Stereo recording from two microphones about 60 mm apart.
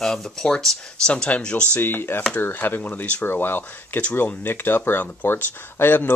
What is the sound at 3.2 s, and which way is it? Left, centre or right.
Speech, left.